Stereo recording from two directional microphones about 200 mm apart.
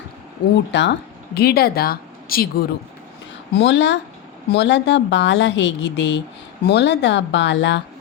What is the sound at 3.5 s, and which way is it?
A woman's voice, 65° left (ahead or behind).